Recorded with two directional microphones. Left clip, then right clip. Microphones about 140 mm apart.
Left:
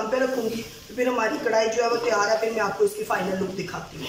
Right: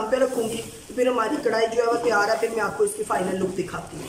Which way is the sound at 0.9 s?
5° right (ahead or behind).